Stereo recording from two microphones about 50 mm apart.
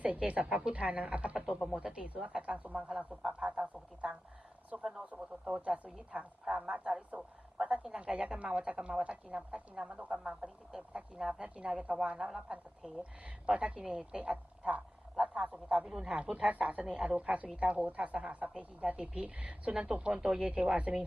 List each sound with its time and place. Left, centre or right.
0.0 s a woman's voice: right
5.6 s a woman's voice: right
10.4 s a woman's voice: centre
11.4 s a woman's voice: right
13.0 s a woman's voice: right
15.1 s a sound: centre
15.9 s a woman's voice: centre
16.2 s a woman's voice: right